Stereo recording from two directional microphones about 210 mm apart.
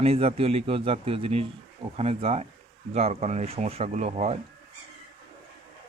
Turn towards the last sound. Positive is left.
turn(degrees=-30)  # may be behind; listen again after turning